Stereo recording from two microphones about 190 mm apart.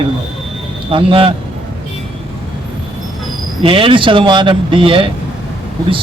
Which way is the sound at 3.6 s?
30° right (ahead or behind).